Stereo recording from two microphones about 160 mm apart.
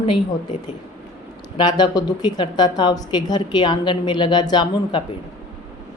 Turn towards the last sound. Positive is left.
turn(degrees=25)  # may be behind; listen again after turning